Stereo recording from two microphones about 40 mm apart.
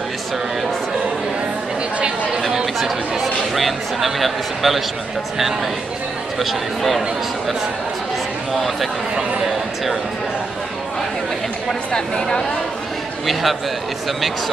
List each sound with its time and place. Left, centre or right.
2.5 s speech: centre
6.4 s speech: centre
11.9 s speech: centre
13.3 s speech: centre